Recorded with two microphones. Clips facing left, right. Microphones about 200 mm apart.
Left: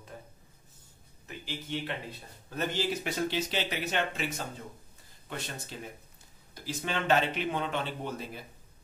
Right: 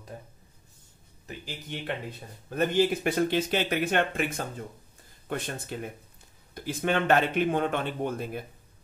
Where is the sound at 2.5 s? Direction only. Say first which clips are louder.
Right 7 dB; 55° right (ahead or behind).